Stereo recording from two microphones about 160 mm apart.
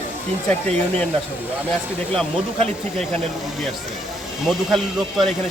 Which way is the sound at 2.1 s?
5° left (ahead or behind).